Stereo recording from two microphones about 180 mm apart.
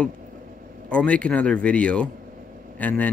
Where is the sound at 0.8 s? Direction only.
5° left (ahead or behind).